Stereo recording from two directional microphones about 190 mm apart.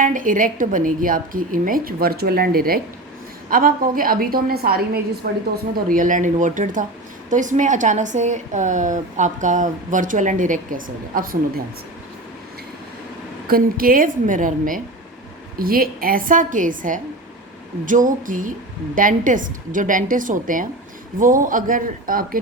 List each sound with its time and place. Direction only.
0.0 s a woman's voice: 45° right (ahead or behind); by 5.4 s 60° right (ahead or behind)
5.7 s a woman's voice: 45° right (ahead or behind)
13.5 s a woman's voice: 50° right (ahead or behind)